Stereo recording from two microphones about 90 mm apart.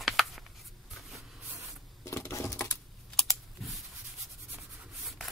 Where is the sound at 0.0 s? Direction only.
Centre (ahead or behind).